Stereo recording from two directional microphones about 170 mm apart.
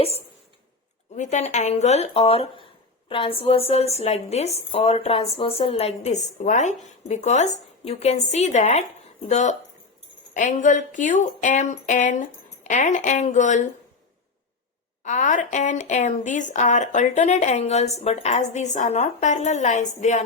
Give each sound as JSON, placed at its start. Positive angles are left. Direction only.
{"t": 1.1, "sound": "a woman's voice", "side_deg": 45}
{"t": 15.0, "sound": "speech", "side_deg": 45}